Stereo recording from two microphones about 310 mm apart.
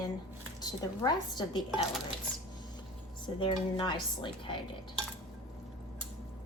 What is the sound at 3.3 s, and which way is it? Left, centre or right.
Speech, centre.